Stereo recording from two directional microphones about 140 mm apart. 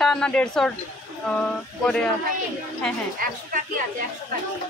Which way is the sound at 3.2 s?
80° right.